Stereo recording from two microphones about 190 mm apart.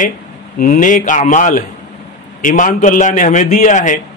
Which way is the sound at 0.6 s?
45° left (ahead or behind).